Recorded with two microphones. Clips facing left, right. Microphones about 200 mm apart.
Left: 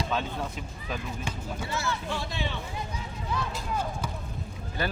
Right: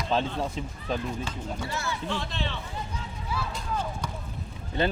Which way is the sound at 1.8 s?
10° left (ahead or behind).